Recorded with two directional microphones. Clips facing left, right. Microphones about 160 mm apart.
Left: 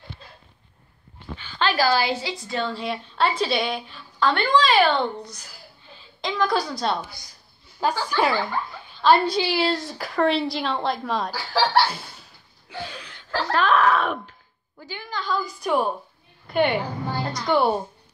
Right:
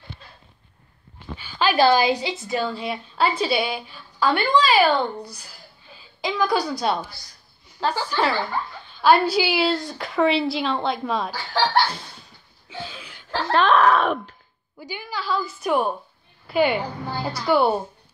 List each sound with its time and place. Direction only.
1.3 s a sound: 10° right (ahead or behind)
1.8 s a woman's voice: 20° right (ahead or behind)
2.6 s a woman's voice: centre (ahead or behind)
6.2 s a woman's voice: 5° right (ahead or behind)
7.8 s speech: 15° left (ahead or behind)
9.0 s a woman's voice: 5° right (ahead or behind)
12.6 s a sound: centre (ahead or behind)
13.3 s wail: 25° right (ahead or behind)
14.8 s a woman's voice: 15° right (ahead or behind)